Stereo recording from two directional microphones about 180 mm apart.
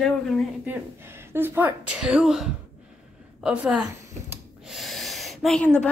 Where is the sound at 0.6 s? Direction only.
10° right (ahead or behind).